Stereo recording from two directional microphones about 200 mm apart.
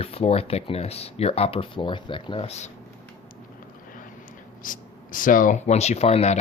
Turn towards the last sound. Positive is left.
turn(degrees=35)  # may be behind; listen again after turning